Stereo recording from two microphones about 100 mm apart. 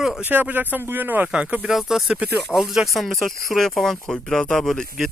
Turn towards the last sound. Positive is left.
turn(degrees=0)  # may be behind; listen again after turning